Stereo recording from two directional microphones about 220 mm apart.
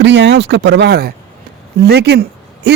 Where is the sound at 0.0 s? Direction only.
50° right (ahead or behind).